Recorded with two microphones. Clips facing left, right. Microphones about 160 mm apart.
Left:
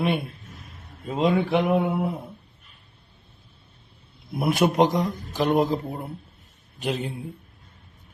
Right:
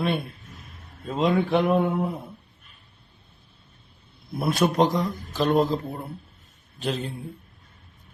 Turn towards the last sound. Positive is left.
turn(degrees=15)  # may be behind; listen again after turning